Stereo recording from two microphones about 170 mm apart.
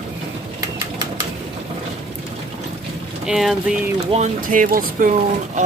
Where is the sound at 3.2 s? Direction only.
Centre (ahead or behind).